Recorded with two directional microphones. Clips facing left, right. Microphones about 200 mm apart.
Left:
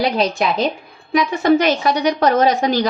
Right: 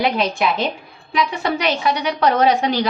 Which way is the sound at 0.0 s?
40° left (ahead or behind).